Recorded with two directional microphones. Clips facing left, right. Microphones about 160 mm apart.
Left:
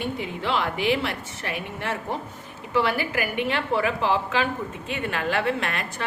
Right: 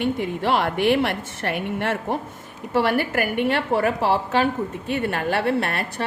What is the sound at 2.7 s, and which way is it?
A woman's voice, 50° right (ahead or behind).